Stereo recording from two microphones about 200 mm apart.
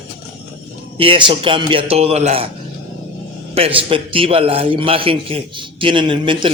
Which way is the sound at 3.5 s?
30° right (ahead or behind).